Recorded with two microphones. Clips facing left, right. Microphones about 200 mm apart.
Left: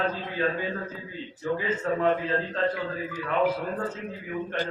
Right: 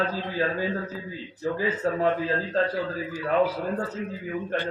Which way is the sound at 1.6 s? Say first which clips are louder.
Right 2 dB; 35° right (ahead or behind).